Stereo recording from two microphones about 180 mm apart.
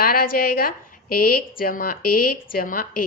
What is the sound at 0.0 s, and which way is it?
A woman's voice, 55° left (ahead or behind).